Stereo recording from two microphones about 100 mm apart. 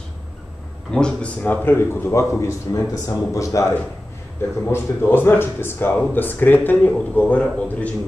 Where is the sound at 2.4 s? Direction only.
35° left (ahead or behind).